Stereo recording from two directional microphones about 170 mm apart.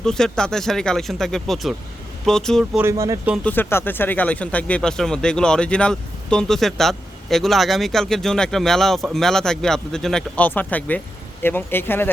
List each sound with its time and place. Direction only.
0.0 s speech: 5° left (ahead or behind)
2.8 s speech: 15° right (ahead or behind)
3.3 s speech: 10° left (ahead or behind)